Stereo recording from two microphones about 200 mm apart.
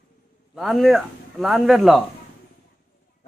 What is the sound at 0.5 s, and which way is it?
A man's voice, centre (ahead or behind).